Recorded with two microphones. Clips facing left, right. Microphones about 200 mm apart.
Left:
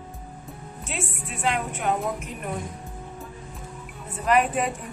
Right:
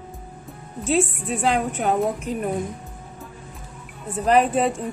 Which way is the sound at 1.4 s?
35° right (ahead or behind).